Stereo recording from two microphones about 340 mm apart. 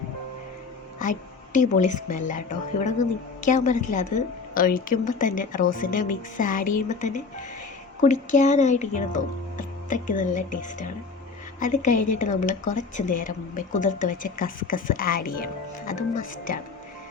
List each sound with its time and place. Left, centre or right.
1.5 s a woman's voice: left